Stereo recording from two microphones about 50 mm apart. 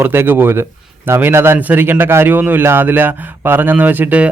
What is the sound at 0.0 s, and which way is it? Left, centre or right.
A man's voice, right.